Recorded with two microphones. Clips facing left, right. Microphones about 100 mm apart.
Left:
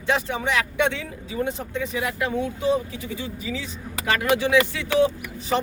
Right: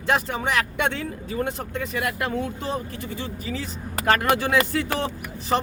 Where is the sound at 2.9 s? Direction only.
45° right (ahead or behind).